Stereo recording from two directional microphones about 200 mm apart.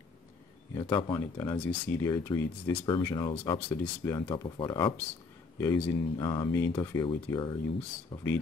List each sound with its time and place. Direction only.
0.7 s speech: 20° left (ahead or behind)
3.4 s speech: 10° left (ahead or behind)
8.1 s speech: 10° left (ahead or behind)